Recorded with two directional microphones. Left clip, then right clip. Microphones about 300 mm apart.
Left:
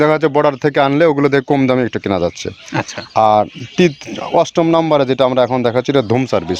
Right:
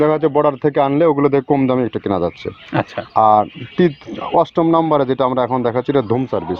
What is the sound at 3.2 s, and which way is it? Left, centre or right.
Speech, left.